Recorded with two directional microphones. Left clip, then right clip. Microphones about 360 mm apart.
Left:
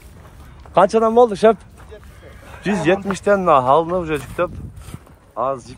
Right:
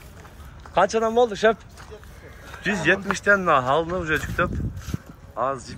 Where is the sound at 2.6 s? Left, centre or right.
Centre.